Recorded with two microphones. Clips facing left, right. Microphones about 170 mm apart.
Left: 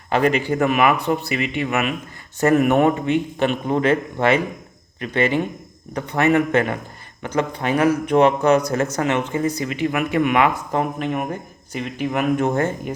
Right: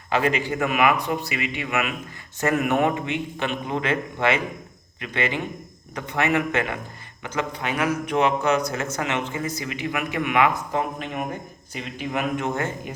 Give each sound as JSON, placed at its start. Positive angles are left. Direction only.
{"t": 0.5, "sound": "a man's voice", "side_deg": 40}
{"t": 10.8, "sound": "speech", "side_deg": 50}